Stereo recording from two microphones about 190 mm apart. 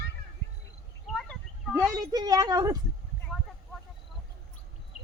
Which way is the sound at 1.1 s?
Centre (ahead or behind).